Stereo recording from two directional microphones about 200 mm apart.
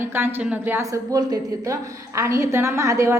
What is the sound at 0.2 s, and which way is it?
A woman's voice, 10° right (ahead or behind).